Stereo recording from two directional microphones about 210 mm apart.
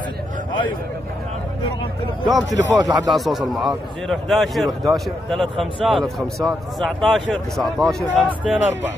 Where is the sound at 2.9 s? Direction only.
20° right (ahead or behind).